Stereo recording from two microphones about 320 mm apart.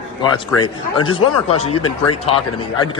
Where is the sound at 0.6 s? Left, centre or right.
Centre.